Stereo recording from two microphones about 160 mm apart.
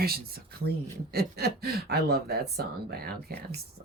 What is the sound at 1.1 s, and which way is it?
Speech, 80° right.